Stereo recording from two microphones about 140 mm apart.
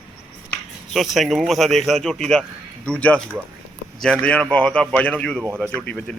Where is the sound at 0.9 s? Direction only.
Centre (ahead or behind).